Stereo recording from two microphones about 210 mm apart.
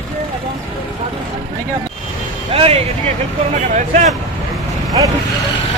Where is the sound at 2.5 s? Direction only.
30° right (ahead or behind).